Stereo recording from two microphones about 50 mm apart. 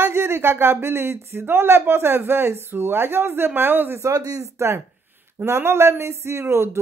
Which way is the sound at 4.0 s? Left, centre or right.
Right.